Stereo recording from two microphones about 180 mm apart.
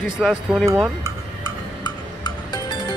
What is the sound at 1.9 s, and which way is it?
Music, 25° left (ahead or behind).